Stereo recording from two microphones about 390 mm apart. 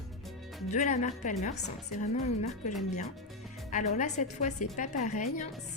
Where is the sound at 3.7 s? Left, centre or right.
Centre.